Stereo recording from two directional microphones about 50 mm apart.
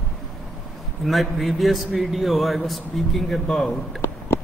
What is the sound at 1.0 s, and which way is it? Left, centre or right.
Speech, centre.